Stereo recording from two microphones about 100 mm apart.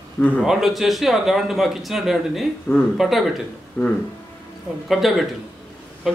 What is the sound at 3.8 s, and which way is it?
Speech, 20° left (ahead or behind).